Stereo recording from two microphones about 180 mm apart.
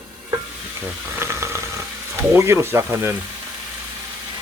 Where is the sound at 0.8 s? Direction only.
15° right (ahead or behind).